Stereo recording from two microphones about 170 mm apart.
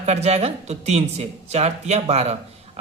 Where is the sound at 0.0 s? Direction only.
40° right (ahead or behind).